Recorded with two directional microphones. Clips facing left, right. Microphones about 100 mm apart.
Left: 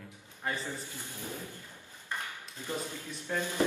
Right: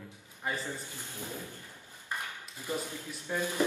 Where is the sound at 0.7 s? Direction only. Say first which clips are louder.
Even; 15° left (ahead or behind).